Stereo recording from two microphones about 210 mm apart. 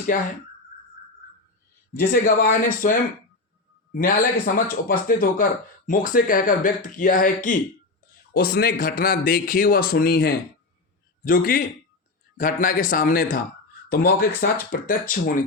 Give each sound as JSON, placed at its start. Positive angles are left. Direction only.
{"t": 0.1, "sound": "speech", "side_deg": 40}
{"t": 2.0, "sound": "speech", "side_deg": 45}